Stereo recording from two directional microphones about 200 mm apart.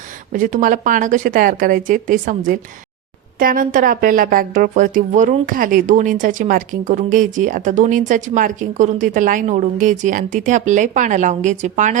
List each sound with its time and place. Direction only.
0.3 s speech: 40° right (ahead or behind)